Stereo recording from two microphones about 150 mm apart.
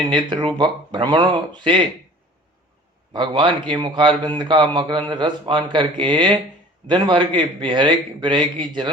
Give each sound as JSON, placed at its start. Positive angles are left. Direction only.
{"t": 0.0, "sound": "a man's voice", "side_deg": -30}
{"t": 3.1, "sound": "a man's voice", "side_deg": -30}